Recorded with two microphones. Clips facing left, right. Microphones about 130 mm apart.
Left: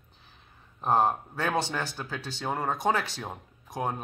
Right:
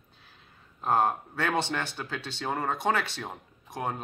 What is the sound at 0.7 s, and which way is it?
Speech, 15° left (ahead or behind).